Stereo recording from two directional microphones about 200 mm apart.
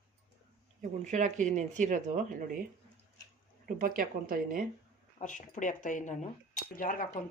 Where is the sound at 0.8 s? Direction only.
40° right (ahead or behind).